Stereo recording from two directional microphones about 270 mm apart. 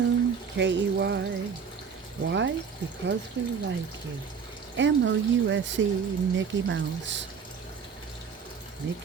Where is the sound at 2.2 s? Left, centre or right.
Right.